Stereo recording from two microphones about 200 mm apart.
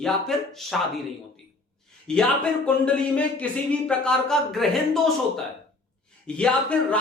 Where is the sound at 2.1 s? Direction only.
5° left (ahead or behind).